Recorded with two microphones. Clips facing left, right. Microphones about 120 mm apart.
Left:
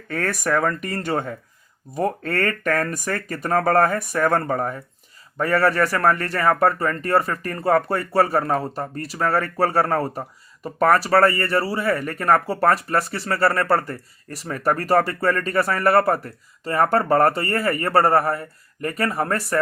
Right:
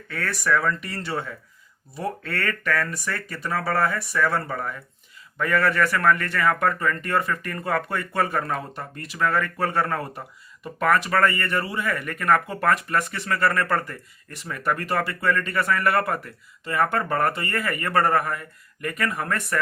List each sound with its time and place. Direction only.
0.1 s speech: 45° left (ahead or behind)